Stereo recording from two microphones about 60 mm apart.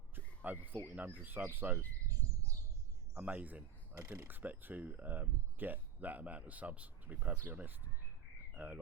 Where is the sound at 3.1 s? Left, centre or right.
Right.